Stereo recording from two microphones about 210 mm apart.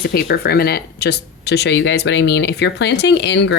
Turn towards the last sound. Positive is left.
turn(degrees=55)  # may be behind; listen again after turning